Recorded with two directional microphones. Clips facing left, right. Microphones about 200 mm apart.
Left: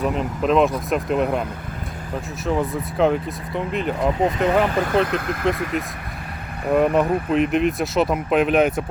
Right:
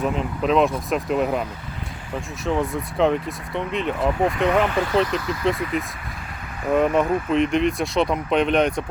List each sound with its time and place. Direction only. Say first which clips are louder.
0.0 s speech: left 1 dB; centre (ahead or behind)
4.6 s speech: left 1 dB; 40° left (ahead or behind)
5.0 s speech: left 1 dB; 55° left (ahead or behind)
5.5 s speech: even; centre (ahead or behind)